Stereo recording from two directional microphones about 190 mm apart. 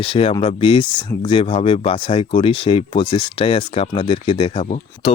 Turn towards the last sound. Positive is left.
turn(degrees=30)  # may be behind; listen again after turning